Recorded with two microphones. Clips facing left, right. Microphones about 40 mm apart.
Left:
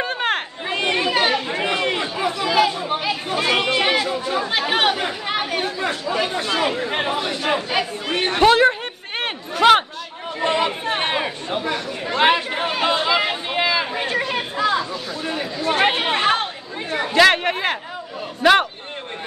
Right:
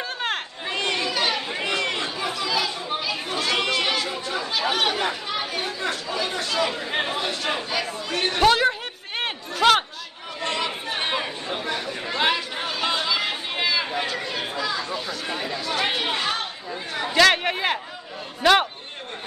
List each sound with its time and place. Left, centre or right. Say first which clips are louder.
0.0 s chatter: left 6 dB; left
2.3 s chatter: left 10 dB; left
6.9 s chatter: left 3 dB; centre
7.7 s chatter: left 4 dB; left
8.4 s a sound: left 5 dB; centre
10.4 s chatter: left 7 dB; left
12.3 s chatter: left 6 dB; left
13.9 s chatter: left 5 dB; left
14.9 s a sound: left 2 dB; centre
15.6 s chatter: left 8 dB; left
17.1 s chatter: left 3 dB; centre
18.4 s a sound: left 3 dB; centre